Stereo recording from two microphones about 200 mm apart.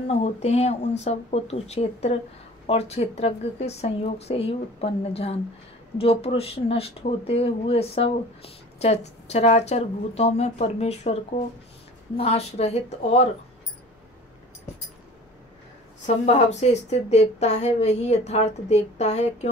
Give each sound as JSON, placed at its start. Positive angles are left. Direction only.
{"t": 0.1, "sound": "speech", "side_deg": 35}
{"t": 12.2, "sound": "speech", "side_deg": 30}
{"t": 16.3, "sound": "speech", "side_deg": 35}